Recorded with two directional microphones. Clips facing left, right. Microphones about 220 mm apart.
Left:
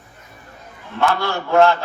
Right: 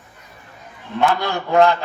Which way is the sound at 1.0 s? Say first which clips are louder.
Right 1 dB; 15° right (ahead or behind).